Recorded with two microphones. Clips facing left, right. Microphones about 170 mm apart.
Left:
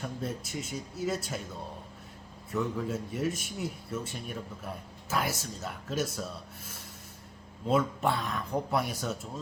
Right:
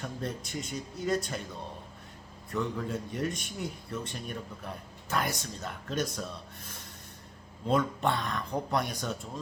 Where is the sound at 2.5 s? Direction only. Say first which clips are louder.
Left 1 dB; 5° left (ahead or behind).